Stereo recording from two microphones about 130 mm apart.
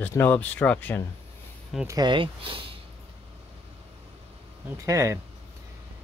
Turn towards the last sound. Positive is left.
turn(degrees=-25)  # may be behind; listen again after turning